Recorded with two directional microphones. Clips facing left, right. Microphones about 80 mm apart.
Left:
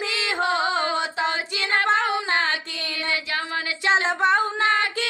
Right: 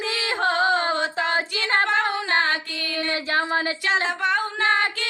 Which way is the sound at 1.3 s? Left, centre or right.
Right.